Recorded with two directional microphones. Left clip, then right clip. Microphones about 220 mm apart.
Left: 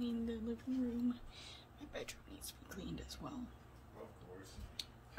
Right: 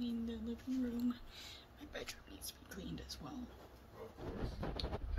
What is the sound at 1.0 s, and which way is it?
Speech, 15° left (ahead or behind).